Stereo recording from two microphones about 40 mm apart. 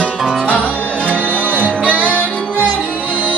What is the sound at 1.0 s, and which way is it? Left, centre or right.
Music, right.